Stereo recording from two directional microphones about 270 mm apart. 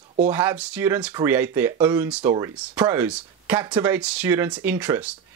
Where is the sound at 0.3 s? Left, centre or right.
Centre.